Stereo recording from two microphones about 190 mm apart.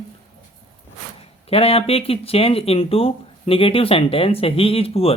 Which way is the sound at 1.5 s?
30° left (ahead or behind).